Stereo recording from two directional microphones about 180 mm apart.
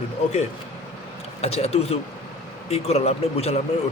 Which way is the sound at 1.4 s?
35° left (ahead or behind).